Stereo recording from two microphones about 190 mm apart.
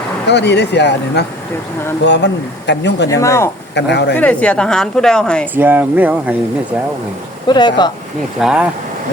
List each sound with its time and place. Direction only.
0.3 s speech: 65° left (ahead or behind)
3.1 s speech: 15° left (ahead or behind)
3.8 s speech: 65° left (ahead or behind)
4.2 s a woman's voice: 5° left (ahead or behind)
5.5 s speech: 10° right (ahead or behind)
7.4 s speech: 25° left (ahead or behind)
8.4 s a woman's voice: 5° right (ahead or behind)